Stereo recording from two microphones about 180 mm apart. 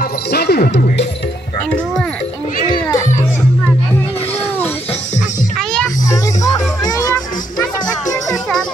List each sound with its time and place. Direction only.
0.3 s music: 60° left (ahead or behind)
2.7 s music: 20° left (ahead or behind)
6.0 s music: 20° left (ahead or behind)